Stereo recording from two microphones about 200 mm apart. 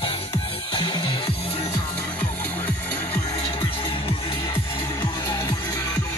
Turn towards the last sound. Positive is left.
turn(degrees=15)  # may be behind; listen again after turning